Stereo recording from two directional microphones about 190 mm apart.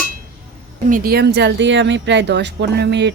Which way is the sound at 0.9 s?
50° right (ahead or behind).